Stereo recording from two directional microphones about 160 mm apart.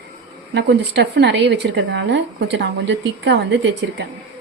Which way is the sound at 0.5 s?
90° right.